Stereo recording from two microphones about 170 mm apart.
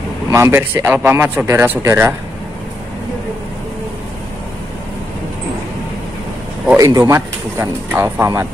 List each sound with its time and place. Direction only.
0.3 s speech: 15° right (ahead or behind)
6.8 s speech: 20° right (ahead or behind)